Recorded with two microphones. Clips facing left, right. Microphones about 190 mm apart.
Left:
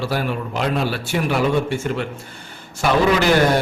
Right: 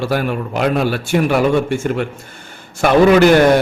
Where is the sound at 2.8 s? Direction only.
55° right (ahead or behind).